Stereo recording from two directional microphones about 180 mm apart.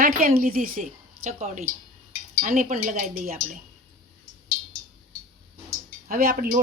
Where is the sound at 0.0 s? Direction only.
55° right (ahead or behind).